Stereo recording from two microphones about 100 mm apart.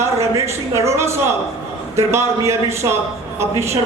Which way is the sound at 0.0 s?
30° right (ahead or behind).